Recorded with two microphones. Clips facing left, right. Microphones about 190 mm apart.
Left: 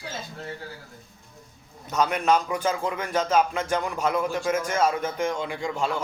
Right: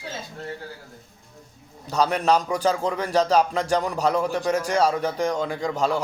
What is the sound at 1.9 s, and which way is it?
A man's voice, 35° right (ahead or behind).